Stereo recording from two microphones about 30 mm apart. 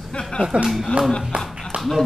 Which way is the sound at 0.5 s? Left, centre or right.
Right.